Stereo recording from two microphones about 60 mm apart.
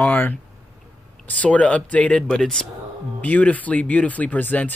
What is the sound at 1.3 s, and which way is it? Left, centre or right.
Speech, left.